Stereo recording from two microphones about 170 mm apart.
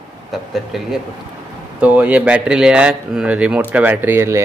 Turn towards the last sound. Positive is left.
turn(degrees=-15)  # may be behind; listen again after turning